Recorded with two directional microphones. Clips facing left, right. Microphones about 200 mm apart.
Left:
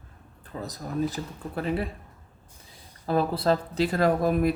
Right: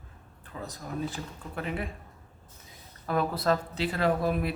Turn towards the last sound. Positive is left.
turn(degrees=45)  # may be behind; listen again after turning